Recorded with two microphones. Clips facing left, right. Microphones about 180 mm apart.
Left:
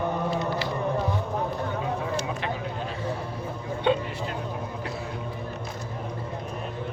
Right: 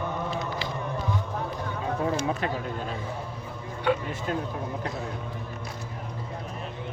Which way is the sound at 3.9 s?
25° left (ahead or behind).